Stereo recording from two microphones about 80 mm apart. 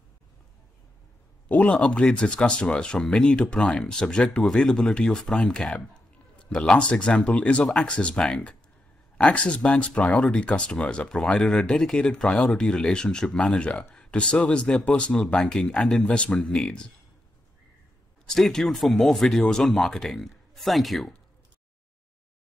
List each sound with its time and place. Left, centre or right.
1.5 s speech: centre
18.3 s speech: centre